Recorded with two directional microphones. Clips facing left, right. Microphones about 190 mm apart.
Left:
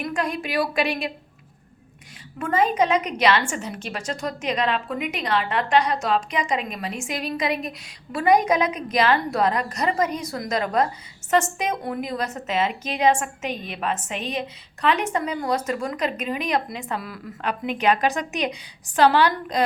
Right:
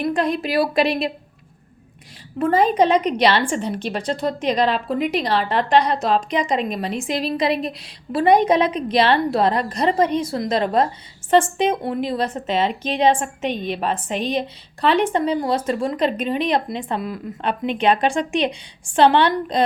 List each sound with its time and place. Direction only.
0.0 s a woman's voice: 35° right (ahead or behind)
2.4 s a woman's voice: 35° right (ahead or behind)